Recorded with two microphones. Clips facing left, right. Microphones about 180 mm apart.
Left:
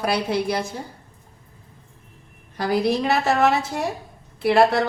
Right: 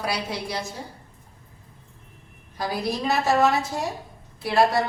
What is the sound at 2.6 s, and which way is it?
Speech, 65° left (ahead or behind).